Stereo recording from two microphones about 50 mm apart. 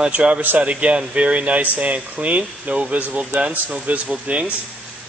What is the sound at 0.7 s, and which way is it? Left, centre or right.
Speech, right.